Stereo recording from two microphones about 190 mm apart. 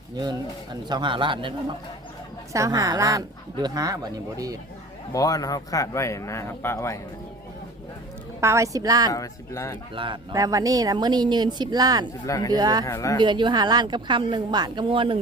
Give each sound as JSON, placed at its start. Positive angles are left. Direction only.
{"t": 0.2, "sound": "speech", "side_deg": -20}
{"t": 2.5, "sound": "speech", "side_deg": -15}
{"t": 5.1, "sound": "speech", "side_deg": 20}
{"t": 8.4, "sound": "a woman's voice", "side_deg": -15}
{"t": 9.1, "sound": "speech", "side_deg": 15}
{"t": 9.9, "sound": "speech", "side_deg": -25}
{"t": 12.2, "sound": "speech", "side_deg": 15}
{"t": 12.5, "sound": "speech", "side_deg": -20}
{"t": 12.8, "sound": "speech", "side_deg": 15}
{"t": 13.2, "sound": "speech", "side_deg": -25}